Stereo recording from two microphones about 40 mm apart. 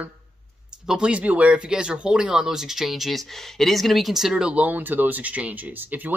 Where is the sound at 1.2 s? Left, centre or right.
Right.